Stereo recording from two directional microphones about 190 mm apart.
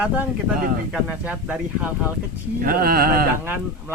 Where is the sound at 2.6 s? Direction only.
50° right (ahead or behind).